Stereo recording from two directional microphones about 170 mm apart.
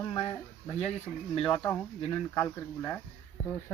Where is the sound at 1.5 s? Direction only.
5° left (ahead or behind).